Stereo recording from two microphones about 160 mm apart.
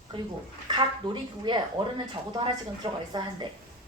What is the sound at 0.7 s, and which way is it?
Speech, 30° right (ahead or behind).